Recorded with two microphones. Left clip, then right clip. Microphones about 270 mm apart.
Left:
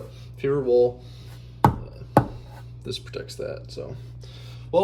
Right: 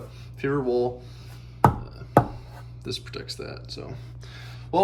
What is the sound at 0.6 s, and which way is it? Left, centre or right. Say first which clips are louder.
Speech: left 7 dB; right.